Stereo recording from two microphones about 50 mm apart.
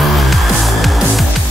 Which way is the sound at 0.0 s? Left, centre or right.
Centre.